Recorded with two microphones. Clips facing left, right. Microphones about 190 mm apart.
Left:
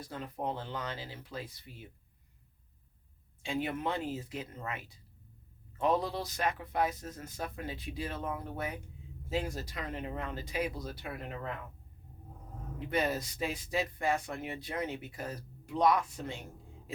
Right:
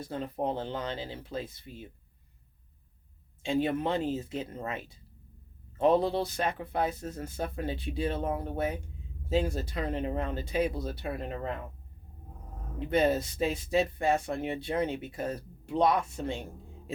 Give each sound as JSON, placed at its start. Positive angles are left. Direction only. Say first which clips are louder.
{"t": 0.0, "sound": "speech", "louder": "right 5 dB", "side_deg": -25}
{"t": 3.4, "sound": "speech", "louder": "right 6 dB", "side_deg": -25}
{"t": 12.9, "sound": "speech", "louder": "right 6 dB", "side_deg": -25}